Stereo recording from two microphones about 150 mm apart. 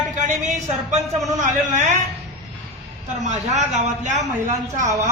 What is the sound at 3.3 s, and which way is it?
Speech, 50° right (ahead or behind).